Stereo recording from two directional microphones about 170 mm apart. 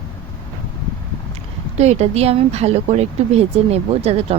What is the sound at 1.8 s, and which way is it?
Speech, 40° right (ahead or behind).